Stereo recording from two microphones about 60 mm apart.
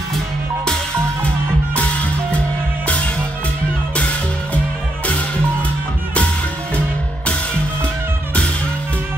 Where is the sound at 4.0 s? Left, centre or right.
Left.